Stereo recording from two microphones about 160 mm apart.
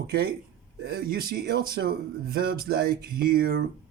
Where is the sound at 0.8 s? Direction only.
75° right (ahead or behind).